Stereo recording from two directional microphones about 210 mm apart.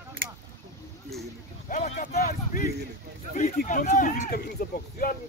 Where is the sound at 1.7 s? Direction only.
35° left (ahead or behind).